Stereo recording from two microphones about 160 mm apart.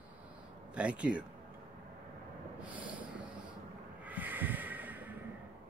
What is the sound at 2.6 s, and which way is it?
Snort, 10° right (ahead or behind).